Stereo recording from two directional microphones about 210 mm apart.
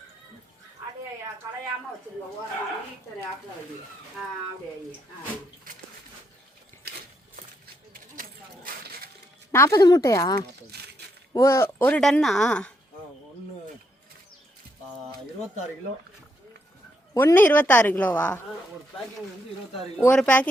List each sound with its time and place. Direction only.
7.9 s a sound: 40° right (ahead or behind)
9.5 s a woman's voice: 15° left (ahead or behind)
10.7 s a sound: 50° right (ahead or behind)
11.3 s speech: 15° left (ahead or behind)
17.2 s a woman's voice: 10° left (ahead or behind)
20.0 s speech: 5° left (ahead or behind)